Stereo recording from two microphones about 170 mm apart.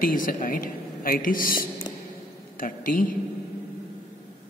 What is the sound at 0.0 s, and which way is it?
A man's voice, 55° left (ahead or behind).